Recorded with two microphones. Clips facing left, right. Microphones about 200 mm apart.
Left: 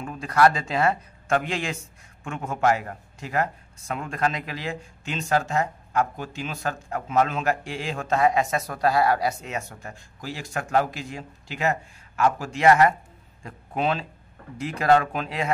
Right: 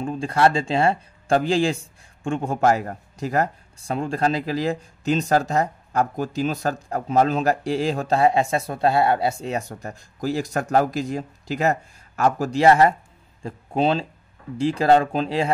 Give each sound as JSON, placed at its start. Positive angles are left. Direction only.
{"t": 0.0, "sound": "a man's voice", "side_deg": -30}